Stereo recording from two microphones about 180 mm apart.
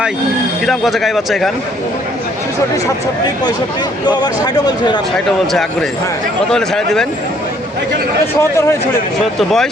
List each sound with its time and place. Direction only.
0.6 s speech: centre (ahead or behind)
4.4 s speech: 20° left (ahead or behind)
5.1 s speech: centre (ahead or behind)
8.4 s speech: 15° left (ahead or behind)
9.4 s speech: centre (ahead or behind)